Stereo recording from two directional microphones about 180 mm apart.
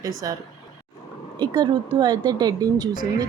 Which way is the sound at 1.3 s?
25° right (ahead or behind).